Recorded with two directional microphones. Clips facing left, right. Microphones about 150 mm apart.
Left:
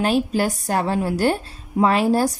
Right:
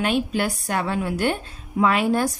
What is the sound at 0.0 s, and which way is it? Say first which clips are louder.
A woman's voice: left 3 dB; 35° left (ahead or behind).